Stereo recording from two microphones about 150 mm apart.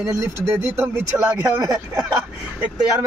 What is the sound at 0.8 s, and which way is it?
Speech, 15° right (ahead or behind).